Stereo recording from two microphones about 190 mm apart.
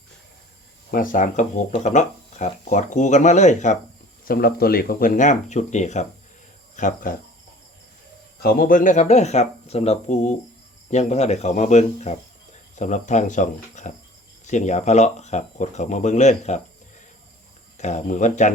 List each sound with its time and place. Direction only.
0.9 s speech: 45° left (ahead or behind)
4.3 s speech: 50° left (ahead or behind)
8.4 s speech: 50° left (ahead or behind); by 16.6 s 35° left (ahead or behind)
17.7 s speech: 40° left (ahead or behind)